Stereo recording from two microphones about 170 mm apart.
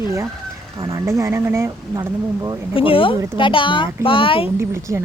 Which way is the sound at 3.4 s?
30° left (ahead or behind).